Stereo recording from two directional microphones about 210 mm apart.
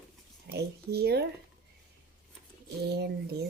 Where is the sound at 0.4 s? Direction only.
50° right (ahead or behind).